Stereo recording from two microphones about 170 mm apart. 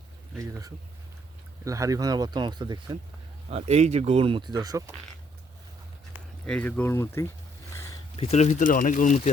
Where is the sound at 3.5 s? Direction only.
40° right (ahead or behind); by 4.9 s 20° right (ahead or behind).